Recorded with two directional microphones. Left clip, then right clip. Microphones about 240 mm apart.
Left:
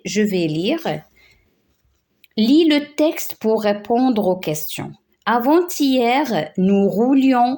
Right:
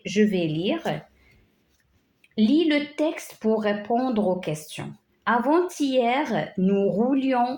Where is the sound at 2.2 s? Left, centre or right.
Left.